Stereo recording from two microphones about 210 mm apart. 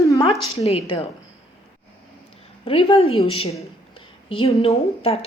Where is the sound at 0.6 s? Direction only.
30° left (ahead or behind).